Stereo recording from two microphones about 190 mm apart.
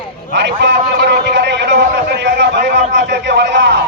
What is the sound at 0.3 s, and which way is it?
A man's voice, 65° right (ahead or behind).